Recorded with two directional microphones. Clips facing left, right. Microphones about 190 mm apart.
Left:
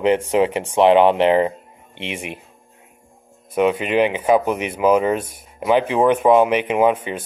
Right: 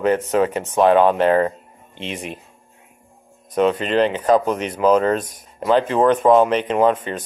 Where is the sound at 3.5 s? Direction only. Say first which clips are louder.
Even; 10° left (ahead or behind).